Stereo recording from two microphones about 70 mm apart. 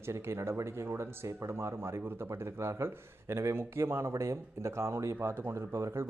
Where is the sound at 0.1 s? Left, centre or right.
Right.